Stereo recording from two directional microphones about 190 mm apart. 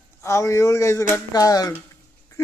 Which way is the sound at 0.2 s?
15° left (ahead or behind).